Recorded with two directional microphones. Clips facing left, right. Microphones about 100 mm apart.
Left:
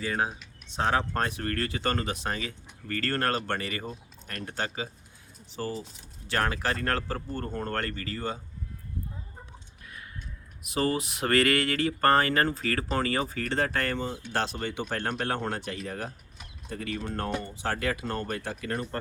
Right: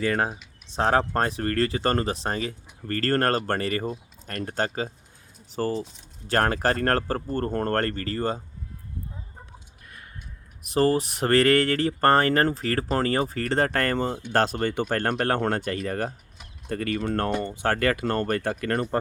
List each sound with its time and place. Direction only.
0.0 s speech: 55° right (ahead or behind)
0.7 s speech: 40° right (ahead or behind)
10.8 s speech: 35° right (ahead or behind); by 18.9 s 65° right (ahead or behind)